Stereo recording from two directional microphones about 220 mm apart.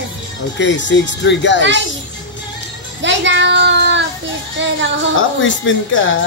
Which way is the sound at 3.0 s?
55° right (ahead or behind).